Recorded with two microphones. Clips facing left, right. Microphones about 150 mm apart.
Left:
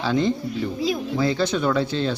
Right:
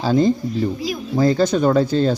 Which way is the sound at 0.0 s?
40° right (ahead or behind).